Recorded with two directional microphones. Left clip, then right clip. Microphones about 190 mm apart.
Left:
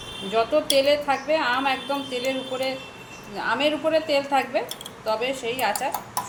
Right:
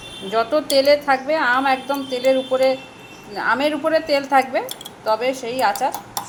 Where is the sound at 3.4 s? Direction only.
25° right (ahead or behind).